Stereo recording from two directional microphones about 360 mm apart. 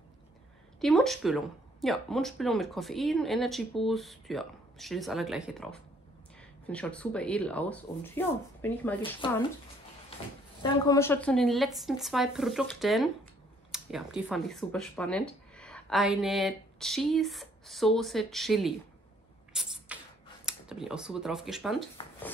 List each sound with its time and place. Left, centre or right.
0.7 s speech: centre
10.6 s speech: centre
19.5 s a sound: centre
20.4 s speech: centre